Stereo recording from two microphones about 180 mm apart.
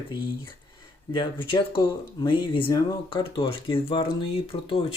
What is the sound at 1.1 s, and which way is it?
Speech, 30° left (ahead or behind).